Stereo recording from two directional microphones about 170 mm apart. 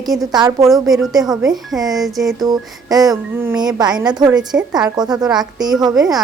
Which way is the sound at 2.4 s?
20° right (ahead or behind).